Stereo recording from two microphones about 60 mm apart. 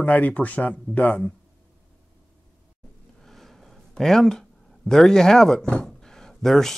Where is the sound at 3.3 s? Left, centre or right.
Centre.